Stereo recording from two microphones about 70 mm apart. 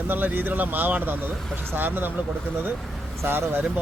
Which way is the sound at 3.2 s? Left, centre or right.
Right.